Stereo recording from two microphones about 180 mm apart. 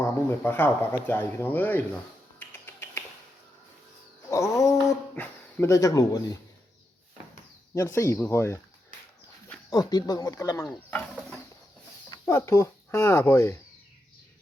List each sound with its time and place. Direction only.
0.1 s speech: 15° left (ahead or behind)
2.4 s finger snapping: 10° left (ahead or behind)
4.3 s speech: 15° left (ahead or behind)
7.8 s speech: 15° left (ahead or behind)
9.6 s speech: 20° left (ahead or behind)